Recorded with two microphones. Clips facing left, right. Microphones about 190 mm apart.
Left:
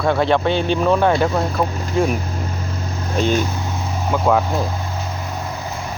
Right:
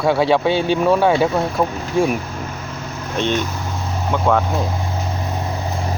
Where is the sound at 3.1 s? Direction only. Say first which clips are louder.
Left 2 dB; 5° left (ahead or behind).